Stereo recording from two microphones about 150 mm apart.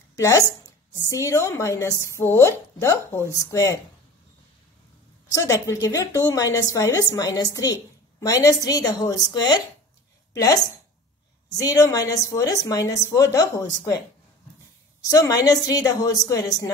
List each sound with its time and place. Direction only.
0.1 s a woman's voice: 20° left (ahead or behind)
5.4 s a woman's voice: 20° left (ahead or behind)
15.0 s a woman's voice: 20° left (ahead or behind)